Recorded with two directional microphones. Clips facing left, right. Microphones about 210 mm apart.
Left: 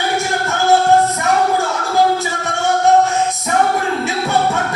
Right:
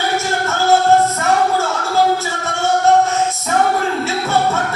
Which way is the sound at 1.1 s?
15° left (ahead or behind).